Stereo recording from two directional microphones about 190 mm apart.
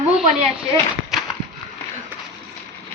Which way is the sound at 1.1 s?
Centre (ahead or behind).